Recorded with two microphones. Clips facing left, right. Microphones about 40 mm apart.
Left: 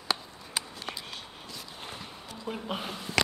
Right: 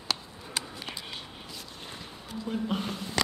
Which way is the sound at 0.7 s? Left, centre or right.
Centre.